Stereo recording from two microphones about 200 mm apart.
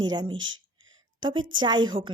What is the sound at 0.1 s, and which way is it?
A woman's voice, 20° right (ahead or behind).